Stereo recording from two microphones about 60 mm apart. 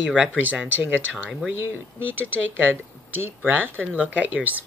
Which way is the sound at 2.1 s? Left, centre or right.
Right.